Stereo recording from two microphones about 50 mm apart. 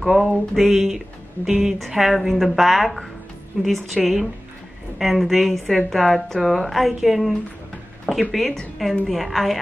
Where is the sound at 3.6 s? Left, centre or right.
Centre.